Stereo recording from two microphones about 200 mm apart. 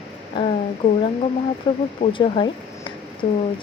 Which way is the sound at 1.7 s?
25° left (ahead or behind).